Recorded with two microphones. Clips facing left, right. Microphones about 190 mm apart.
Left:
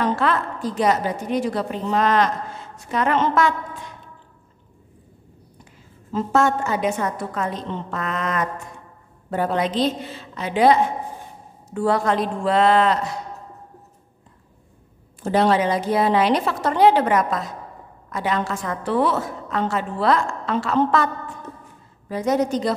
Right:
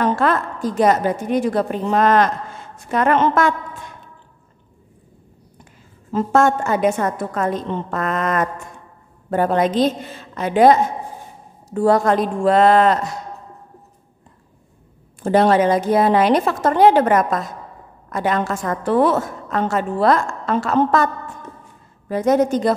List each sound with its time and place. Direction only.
0.0 s a woman's voice: 45° right (ahead or behind)
6.1 s a woman's voice: 50° right (ahead or behind)
15.2 s a woman's voice: 50° right (ahead or behind)
22.1 s a woman's voice: 50° right (ahead or behind)